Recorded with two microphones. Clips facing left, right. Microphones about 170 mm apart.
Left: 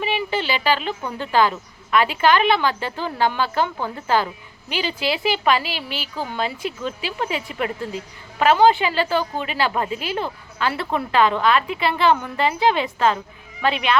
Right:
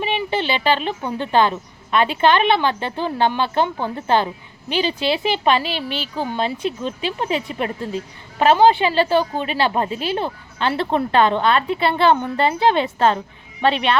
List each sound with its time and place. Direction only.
0.0 s a woman's voice: 25° right (ahead or behind)
9.9 s speech: 15° left (ahead or behind)
10.2 s a woman's voice: 25° right (ahead or behind)